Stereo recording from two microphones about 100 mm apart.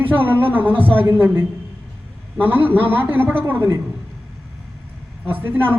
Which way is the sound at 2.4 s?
20° right (ahead or behind).